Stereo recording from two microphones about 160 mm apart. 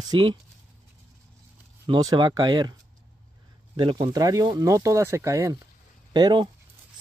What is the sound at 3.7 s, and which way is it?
Speech, 30° right (ahead or behind).